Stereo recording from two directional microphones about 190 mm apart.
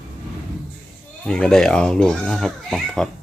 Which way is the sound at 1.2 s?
5° left (ahead or behind).